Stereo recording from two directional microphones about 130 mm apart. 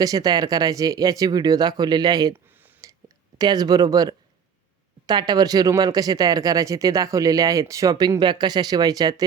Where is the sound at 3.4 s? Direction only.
30° right (ahead or behind).